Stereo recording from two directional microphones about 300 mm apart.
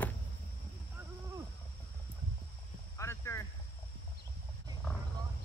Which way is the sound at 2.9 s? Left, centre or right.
Centre.